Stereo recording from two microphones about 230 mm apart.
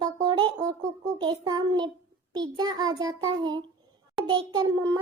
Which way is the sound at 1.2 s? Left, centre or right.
Centre.